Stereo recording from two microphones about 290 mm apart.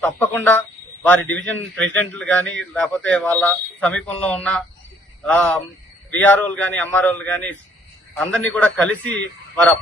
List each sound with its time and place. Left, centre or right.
0.0 s speech: centre